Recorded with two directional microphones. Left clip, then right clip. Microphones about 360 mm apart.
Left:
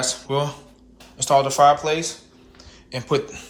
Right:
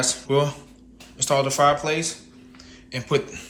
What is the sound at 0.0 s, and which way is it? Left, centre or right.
Speech, centre.